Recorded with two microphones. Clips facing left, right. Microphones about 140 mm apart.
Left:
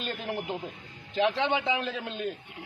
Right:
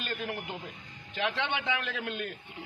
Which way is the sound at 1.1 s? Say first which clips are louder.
Left 6 dB; 35° left (ahead or behind).